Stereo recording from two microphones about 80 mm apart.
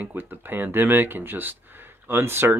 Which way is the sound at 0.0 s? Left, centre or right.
Right.